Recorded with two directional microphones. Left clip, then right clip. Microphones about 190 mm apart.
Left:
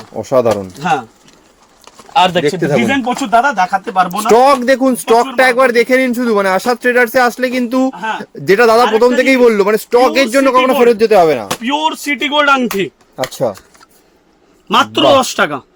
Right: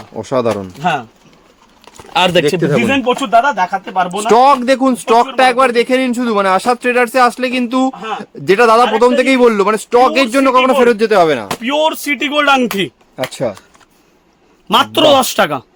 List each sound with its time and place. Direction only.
0.2 s speech: centre (ahead or behind)
0.8 s speech: 25° right (ahead or behind)
2.1 s speech: 50° right (ahead or behind)
2.6 s speech: 10° right (ahead or behind)
3.5 s speech: 5° right (ahead or behind)
11.6 s speech: 45° right (ahead or behind)
13.1 s speech: centre (ahead or behind)
14.7 s a man's voice: 60° right (ahead or behind)